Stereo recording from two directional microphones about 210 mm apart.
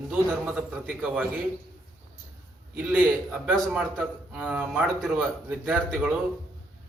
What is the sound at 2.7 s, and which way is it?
A man's voice, 10° right (ahead or behind).